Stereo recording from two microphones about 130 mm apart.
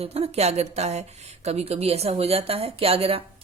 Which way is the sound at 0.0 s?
50° right (ahead or behind).